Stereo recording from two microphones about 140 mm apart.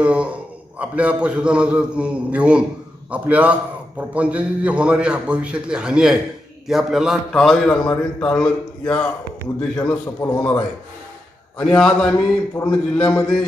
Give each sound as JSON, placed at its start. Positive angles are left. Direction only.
{"t": 0.0, "sound": "a man's voice", "side_deg": -10}
{"t": 11.6, "sound": "a man's voice", "side_deg": 5}
{"t": 12.6, "sound": "a man's voice", "side_deg": 20}